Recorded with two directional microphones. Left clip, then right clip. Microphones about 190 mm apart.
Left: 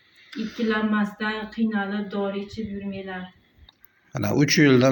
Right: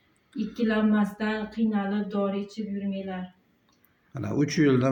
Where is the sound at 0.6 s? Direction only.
30° right (ahead or behind).